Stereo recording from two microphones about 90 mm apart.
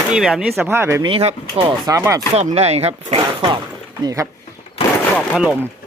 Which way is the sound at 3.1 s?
70° right (ahead or behind).